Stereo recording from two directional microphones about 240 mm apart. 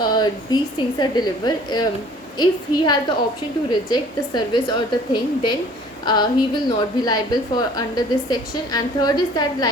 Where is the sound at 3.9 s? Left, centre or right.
Centre.